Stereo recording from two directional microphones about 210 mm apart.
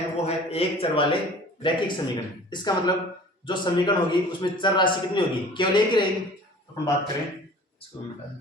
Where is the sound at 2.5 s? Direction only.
20° left (ahead or behind).